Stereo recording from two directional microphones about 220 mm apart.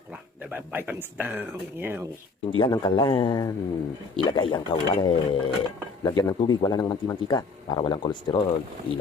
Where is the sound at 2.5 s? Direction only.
20° left (ahead or behind).